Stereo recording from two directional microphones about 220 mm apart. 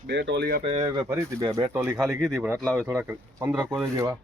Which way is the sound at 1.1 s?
15° right (ahead or behind).